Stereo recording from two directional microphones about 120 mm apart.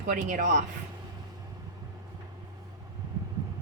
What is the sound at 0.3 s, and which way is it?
Speech, 90° right.